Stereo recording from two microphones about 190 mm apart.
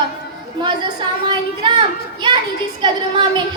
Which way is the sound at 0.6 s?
25° right (ahead or behind).